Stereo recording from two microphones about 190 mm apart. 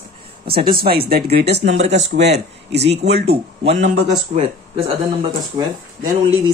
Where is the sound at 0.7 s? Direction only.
50° right (ahead or behind).